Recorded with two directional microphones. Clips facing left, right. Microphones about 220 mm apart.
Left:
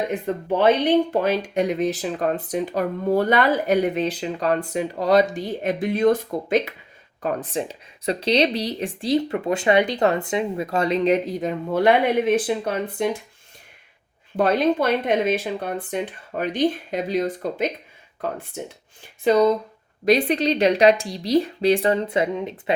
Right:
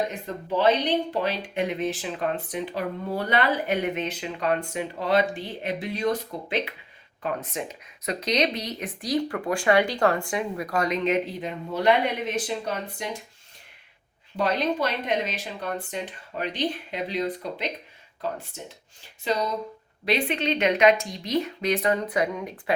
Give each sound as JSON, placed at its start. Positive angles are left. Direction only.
{"t": 0.1, "sound": "speech", "side_deg": 55}
{"t": 7.2, "sound": "speech", "side_deg": 35}
{"t": 14.3, "sound": "speech", "side_deg": 50}
{"t": 20.1, "sound": "speech", "side_deg": 40}